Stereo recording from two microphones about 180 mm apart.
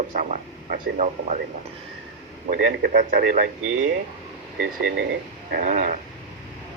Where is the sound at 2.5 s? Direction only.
50° right (ahead or behind).